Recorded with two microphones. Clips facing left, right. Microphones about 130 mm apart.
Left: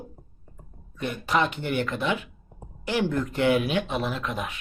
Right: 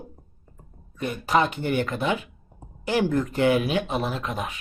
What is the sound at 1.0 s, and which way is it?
Speech, 40° right (ahead or behind).